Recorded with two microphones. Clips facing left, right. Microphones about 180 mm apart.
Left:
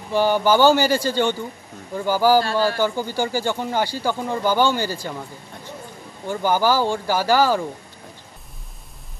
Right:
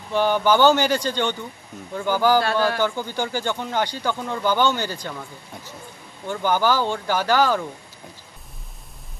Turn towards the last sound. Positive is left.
turn(degrees=10)  # may be behind; listen again after turning